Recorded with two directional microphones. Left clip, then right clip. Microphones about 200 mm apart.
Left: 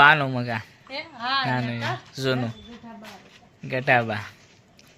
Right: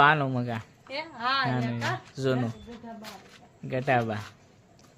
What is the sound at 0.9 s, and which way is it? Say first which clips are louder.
Speech: left 1 dB; 60° right (ahead or behind).